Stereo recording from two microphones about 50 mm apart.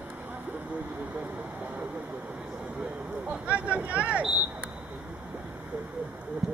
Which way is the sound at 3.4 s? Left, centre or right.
Right.